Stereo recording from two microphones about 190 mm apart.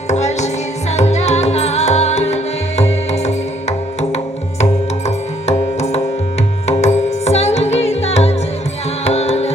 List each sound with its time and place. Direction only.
0.1 s music: 35° left (ahead or behind)